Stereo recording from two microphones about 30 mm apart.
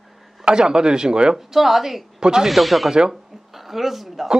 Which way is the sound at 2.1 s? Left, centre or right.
Right.